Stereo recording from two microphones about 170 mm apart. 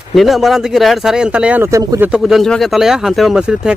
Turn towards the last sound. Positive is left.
turn(degrees=-5)  # may be behind; listen again after turning